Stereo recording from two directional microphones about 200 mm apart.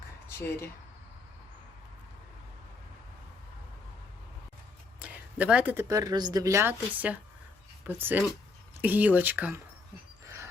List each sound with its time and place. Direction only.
0.3 s speech: 10° left (ahead or behind)
4.9 s speech: 5° right (ahead or behind)
10.2 s music: 15° right (ahead or behind)